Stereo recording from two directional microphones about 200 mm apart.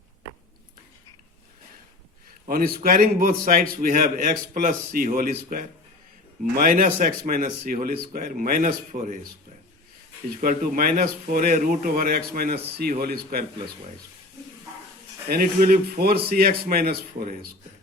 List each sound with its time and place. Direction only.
2.5 s a man's voice: 50° right (ahead or behind)
10.4 s a man's voice: 45° right (ahead or behind)
15.3 s a man's voice: 45° right (ahead or behind)